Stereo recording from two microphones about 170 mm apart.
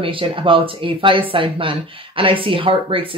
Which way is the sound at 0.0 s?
30° right (ahead or behind).